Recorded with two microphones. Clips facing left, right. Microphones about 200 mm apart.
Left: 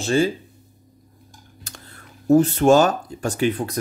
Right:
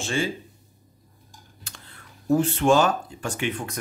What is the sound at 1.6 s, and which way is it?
Speech, 40° left (ahead or behind).